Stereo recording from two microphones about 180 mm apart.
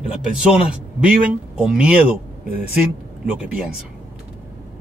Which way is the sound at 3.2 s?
5° right (ahead or behind).